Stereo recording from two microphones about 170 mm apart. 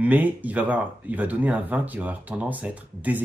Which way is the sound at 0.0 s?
10° right (ahead or behind).